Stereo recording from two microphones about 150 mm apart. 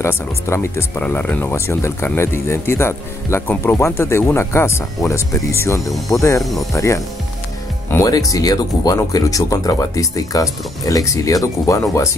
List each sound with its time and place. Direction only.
0.0 s speech: 15° left (ahead or behind)